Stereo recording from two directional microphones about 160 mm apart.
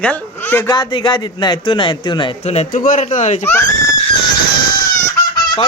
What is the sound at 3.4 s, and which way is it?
Speech, 15° left (ahead or behind).